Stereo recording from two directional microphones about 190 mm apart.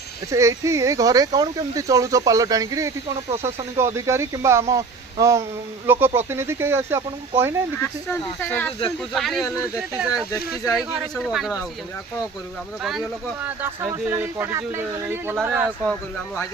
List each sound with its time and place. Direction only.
0.3 s speech: 15° right (ahead or behind)
7.8 s speech: 10° left (ahead or behind)
12.8 s speech: centre (ahead or behind)
15.9 s speech: 5° left (ahead or behind)